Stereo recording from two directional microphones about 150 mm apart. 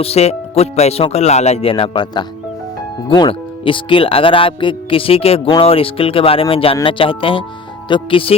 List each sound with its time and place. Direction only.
0.0 s speech: 45° left (ahead or behind)